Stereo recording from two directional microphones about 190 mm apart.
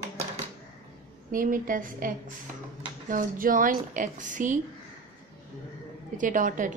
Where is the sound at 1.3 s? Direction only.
45° right (ahead or behind).